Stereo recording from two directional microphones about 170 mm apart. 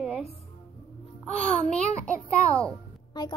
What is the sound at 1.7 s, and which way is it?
A child's voice, 5° left (ahead or behind).